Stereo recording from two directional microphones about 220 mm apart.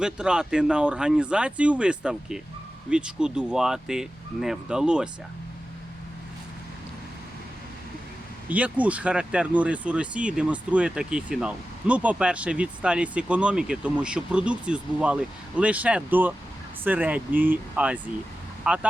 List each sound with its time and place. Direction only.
0.0 s speech: 5° right (ahead or behind)
8.4 s speech: 5° right (ahead or behind)